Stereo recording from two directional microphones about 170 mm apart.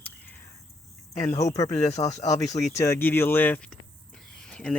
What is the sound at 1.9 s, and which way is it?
Speech, 40° left (ahead or behind).